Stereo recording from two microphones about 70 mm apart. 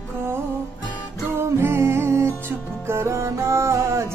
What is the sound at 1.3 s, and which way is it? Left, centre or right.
Music, right.